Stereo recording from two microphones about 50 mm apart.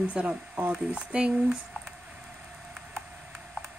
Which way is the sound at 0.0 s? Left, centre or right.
Right.